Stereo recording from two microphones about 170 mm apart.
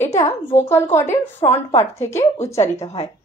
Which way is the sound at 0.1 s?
20° left (ahead or behind).